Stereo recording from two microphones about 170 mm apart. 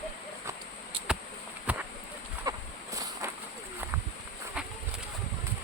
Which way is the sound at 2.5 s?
20° right (ahead or behind).